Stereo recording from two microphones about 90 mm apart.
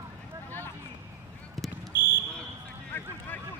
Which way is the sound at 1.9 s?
25° right (ahead or behind).